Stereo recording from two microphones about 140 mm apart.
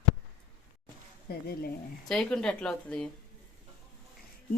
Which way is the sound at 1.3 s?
90° left.